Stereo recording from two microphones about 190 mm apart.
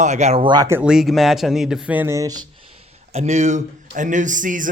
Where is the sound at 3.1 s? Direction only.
35° right (ahead or behind).